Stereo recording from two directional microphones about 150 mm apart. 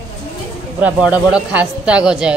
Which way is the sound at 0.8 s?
10° right (ahead or behind).